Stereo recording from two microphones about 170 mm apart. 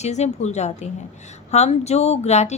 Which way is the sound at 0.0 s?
40° left (ahead or behind).